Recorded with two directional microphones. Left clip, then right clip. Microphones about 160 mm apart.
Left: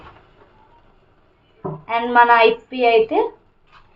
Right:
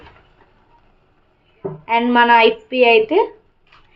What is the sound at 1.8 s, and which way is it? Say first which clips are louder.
Speech: even; 30° right (ahead or behind).